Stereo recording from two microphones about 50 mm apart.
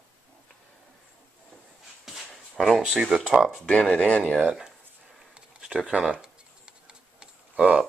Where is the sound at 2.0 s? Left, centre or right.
Centre.